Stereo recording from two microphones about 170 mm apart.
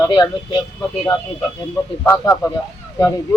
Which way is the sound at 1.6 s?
15° left (ahead or behind).